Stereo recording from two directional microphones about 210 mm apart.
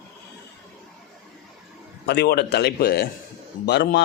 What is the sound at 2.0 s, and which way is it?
Speech, 50° left (ahead or behind).